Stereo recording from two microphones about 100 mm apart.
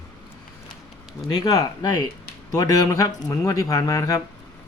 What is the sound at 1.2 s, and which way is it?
Speech, 40° left (ahead or behind).